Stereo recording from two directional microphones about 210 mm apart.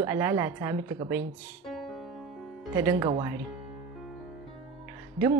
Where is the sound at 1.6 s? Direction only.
Centre (ahead or behind).